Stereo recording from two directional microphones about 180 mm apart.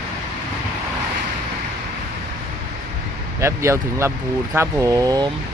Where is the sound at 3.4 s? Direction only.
15° right (ahead or behind).